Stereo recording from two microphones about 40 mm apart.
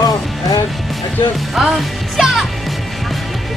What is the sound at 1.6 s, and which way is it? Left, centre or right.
Music, centre.